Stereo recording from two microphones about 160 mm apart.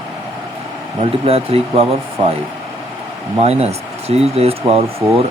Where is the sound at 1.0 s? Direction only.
40° right (ahead or behind).